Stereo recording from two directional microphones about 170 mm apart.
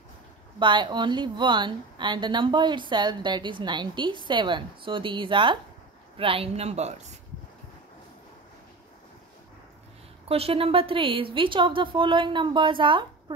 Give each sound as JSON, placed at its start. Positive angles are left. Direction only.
{"t": 0.6, "sound": "a woman's voice", "side_deg": -30}
{"t": 10.2, "sound": "a woman's voice", "side_deg": -35}